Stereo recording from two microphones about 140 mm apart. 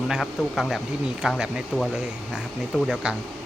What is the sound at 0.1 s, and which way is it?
Speech, centre (ahead or behind).